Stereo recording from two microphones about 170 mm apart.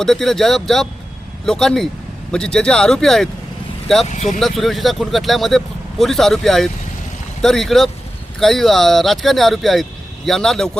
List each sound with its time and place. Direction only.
0.0 s speech: centre (ahead or behind)
4.1 s speech: 45° left (ahead or behind)
4.4 s speech: centre (ahead or behind)